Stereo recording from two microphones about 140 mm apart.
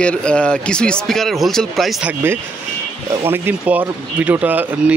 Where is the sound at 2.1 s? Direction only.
15° right (ahead or behind).